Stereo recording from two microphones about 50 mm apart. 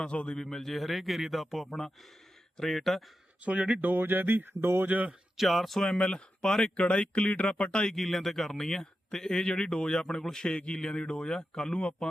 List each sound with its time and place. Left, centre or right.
0.0 s speech: left
0.3 s a man's voice: centre
3.4 s speech: right
3.8 s speech: right
4.9 s speech: right
5.4 s a man's voice: centre
5.8 s speech: centre
7.9 s speech: centre; by 11.9 s left